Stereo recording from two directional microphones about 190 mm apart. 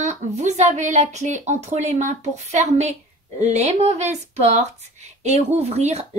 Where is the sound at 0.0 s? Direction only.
40° right (ahead or behind).